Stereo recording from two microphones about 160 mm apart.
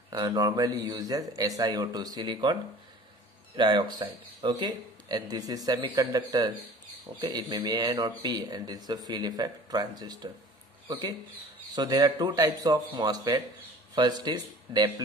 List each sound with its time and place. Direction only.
0.1 s speech: 25° right (ahead or behind)
3.5 s speech: 30° right (ahead or behind)